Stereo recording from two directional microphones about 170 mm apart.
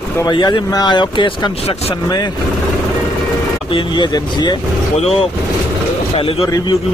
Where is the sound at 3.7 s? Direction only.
30° left (ahead or behind).